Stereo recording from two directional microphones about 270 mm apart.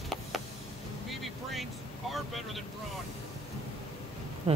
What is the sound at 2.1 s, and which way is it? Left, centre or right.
Speech, centre.